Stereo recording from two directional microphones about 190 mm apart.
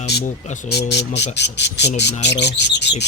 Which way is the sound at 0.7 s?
60° left (ahead or behind).